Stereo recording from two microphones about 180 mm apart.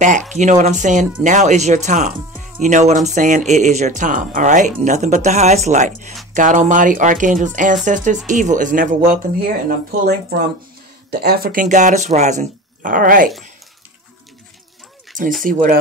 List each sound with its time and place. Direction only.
0.3 s speech: 40° right (ahead or behind)
15.4 s speech: 50° right (ahead or behind)